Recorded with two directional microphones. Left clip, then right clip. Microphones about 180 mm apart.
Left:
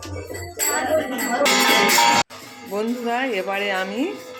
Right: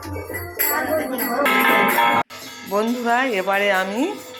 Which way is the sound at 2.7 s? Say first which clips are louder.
Right 4 dB; 5° right (ahead or behind).